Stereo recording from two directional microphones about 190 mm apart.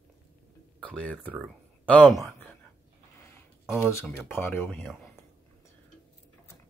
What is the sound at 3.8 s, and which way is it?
Speech, 15° left (ahead or behind).